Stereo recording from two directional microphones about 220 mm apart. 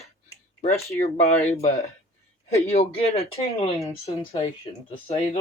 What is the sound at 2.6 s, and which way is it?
Speech, 30° left (ahead or behind).